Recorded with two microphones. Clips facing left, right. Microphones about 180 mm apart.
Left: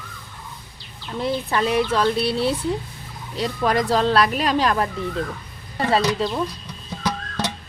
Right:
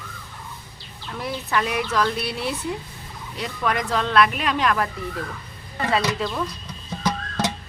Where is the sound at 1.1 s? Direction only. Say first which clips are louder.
Left 4 dB; 25° left (ahead or behind).